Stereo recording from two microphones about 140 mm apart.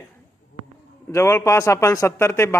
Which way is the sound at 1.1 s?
20° left (ahead or behind).